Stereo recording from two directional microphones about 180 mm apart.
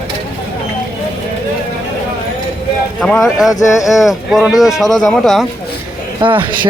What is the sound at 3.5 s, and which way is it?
Speech, 20° left (ahead or behind).